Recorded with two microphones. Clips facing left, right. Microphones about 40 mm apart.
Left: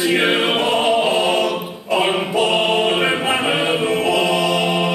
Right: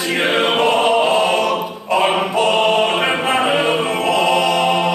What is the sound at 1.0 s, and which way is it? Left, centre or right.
Choir, right.